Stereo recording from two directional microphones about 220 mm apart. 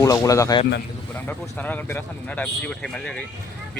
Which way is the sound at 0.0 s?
15° left (ahead or behind).